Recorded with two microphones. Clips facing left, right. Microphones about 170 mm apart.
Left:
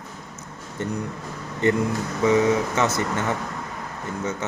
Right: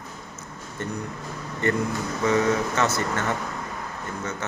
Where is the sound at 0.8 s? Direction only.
20° left (ahead or behind).